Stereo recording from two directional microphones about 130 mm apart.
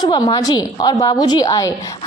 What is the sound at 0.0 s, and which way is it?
A woman's voice, 35° left (ahead or behind).